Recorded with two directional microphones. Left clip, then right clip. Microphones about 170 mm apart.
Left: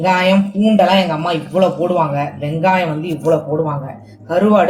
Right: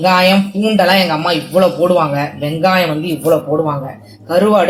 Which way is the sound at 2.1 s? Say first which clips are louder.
Right 2 dB; 45° right (ahead or behind).